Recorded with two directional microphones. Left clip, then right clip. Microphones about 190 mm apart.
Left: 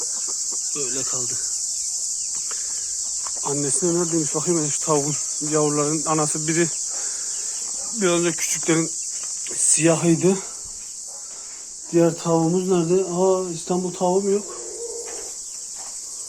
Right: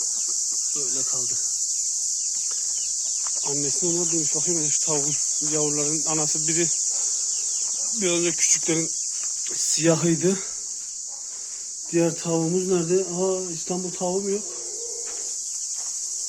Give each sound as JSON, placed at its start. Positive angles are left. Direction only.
{"t": 0.8, "sound": "speech", "side_deg": -10}
{"t": 3.4, "sound": "speech", "side_deg": -5}
{"t": 7.9, "sound": "speech", "side_deg": -15}
{"t": 11.9, "sound": "speech", "side_deg": -25}